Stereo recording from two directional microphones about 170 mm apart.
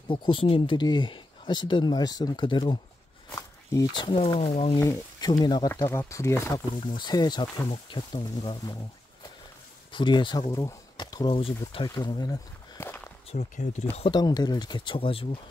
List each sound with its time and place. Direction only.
0.1 s speech: 30° left (ahead or behind)
4.7 s speech: 20° left (ahead or behind)
5.7 s speech: 15° left (ahead or behind)
9.9 s speech: 30° left (ahead or behind)
11.7 s a sound: 25° left (ahead or behind)
13.3 s speech: 40° left (ahead or behind)
13.9 s speech: 30° left (ahead or behind)